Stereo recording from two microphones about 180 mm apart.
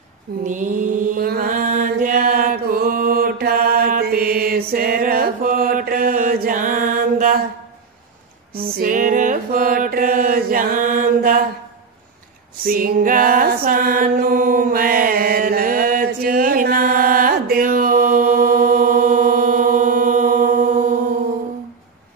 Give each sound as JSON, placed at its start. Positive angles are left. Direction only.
{"t": 0.5, "sound": "mantra", "side_deg": -45}
{"t": 8.5, "sound": "mantra", "side_deg": -55}
{"t": 12.6, "sound": "mantra", "side_deg": -55}